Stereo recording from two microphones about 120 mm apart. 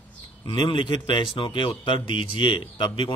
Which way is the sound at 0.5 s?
40° left (ahead or behind).